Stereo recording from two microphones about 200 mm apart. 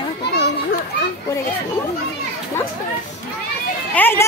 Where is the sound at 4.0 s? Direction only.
10° left (ahead or behind).